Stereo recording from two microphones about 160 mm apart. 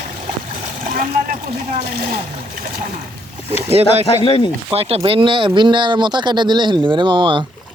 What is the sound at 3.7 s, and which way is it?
Speech, 40° right (ahead or behind).